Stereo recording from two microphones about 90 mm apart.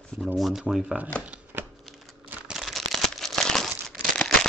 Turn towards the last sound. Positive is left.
turn(degrees=5)  # may be behind; listen again after turning